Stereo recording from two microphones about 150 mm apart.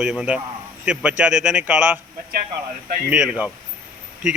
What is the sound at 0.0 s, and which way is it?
Speech, 5° right (ahead or behind).